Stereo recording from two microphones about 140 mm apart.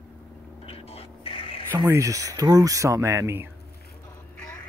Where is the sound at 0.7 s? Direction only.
45° left (ahead or behind).